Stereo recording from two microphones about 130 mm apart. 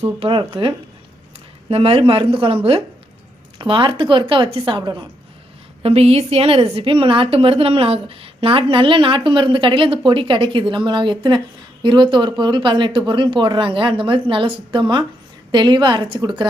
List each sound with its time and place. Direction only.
0.2 s speech: 40° right (ahead or behind)
1.7 s a woman's voice: 45° right (ahead or behind)
5.8 s a woman's voice: 50° right (ahead or behind)